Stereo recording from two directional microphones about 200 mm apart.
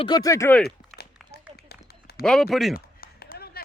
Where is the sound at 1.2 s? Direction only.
Centre (ahead or behind).